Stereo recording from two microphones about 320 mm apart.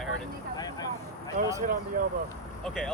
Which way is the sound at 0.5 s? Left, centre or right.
Centre.